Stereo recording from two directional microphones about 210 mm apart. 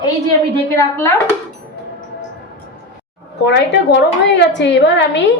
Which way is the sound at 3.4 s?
55° left (ahead or behind).